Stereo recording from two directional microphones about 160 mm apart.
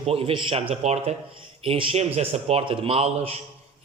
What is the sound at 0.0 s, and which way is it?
A man's voice, 40° right (ahead or behind).